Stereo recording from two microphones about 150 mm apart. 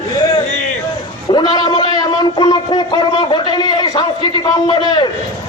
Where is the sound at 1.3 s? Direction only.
30° left (ahead or behind).